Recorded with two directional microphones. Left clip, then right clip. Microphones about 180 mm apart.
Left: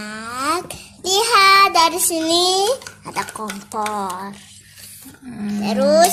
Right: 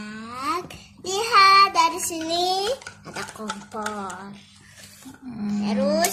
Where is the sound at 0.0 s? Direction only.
45° left (ahead or behind).